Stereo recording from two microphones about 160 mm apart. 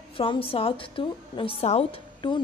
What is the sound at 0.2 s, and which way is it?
A woman's voice, 35° left (ahead or behind).